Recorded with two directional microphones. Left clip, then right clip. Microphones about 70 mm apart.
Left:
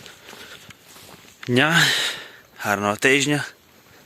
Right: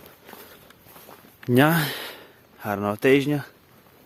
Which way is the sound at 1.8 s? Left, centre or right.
Centre.